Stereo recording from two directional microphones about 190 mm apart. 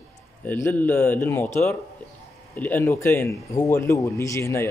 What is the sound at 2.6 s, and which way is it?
A man's voice, 10° left (ahead or behind).